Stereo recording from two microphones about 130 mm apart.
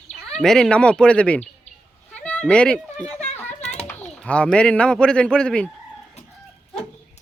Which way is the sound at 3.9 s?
10° left (ahead or behind).